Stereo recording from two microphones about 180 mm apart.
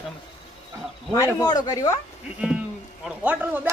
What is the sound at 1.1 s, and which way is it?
Speech, 20° left (ahead or behind).